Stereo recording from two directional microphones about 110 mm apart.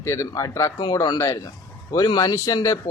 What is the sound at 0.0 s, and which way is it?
A man's voice, 30° left (ahead or behind).